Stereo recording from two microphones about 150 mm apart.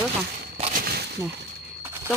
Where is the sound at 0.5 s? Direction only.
55° right (ahead or behind).